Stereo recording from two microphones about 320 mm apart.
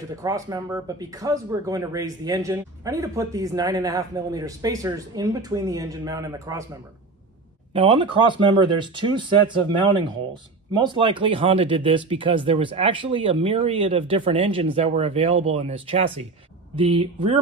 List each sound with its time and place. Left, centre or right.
0.1 s speech: centre
7.7 s speech: centre